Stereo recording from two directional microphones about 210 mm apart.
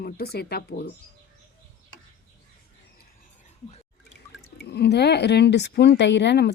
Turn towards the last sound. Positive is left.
turn(degrees=55)  # may be behind; listen again after turning